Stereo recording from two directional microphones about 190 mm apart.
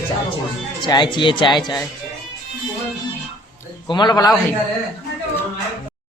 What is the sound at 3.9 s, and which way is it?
Speech, 20° left (ahead or behind).